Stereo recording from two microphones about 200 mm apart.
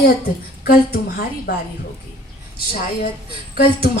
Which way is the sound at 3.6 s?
50° left (ahead or behind).